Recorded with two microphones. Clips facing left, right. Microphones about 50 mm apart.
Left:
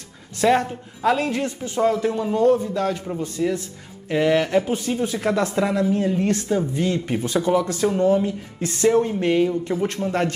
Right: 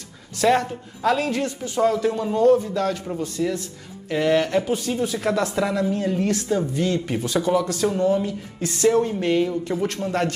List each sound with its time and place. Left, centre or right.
0.4 s a man's voice: left
5.9 s speech: centre
6.2 s a man's voice: left